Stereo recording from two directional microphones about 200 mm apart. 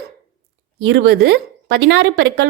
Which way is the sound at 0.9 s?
65° right (ahead or behind).